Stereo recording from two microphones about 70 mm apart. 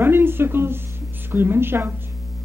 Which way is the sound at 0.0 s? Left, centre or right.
Right.